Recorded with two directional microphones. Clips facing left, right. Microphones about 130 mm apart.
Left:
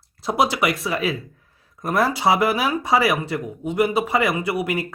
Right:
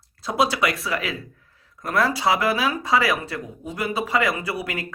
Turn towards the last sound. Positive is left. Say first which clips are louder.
# left 5 dB
turn(degrees=25)  # may be behind; listen again after turning